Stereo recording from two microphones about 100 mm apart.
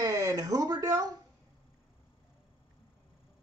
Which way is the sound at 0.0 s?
35° right (ahead or behind).